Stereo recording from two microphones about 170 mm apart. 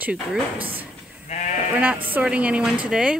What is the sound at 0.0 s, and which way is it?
Speech, 5° right (ahead or behind).